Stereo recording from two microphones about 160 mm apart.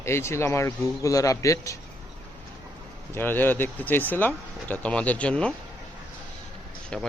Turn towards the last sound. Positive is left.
turn(degrees=5)  # may be behind; listen again after turning